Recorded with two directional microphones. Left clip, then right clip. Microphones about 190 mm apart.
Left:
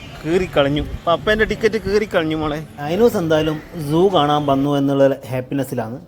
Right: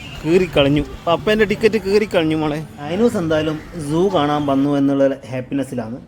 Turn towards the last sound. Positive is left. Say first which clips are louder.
# left 1 dB
turn(degrees=10)  # may be behind; listen again after turning